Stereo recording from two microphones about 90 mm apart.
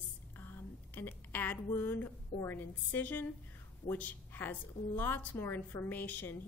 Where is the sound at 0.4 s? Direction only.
25° left (ahead or behind).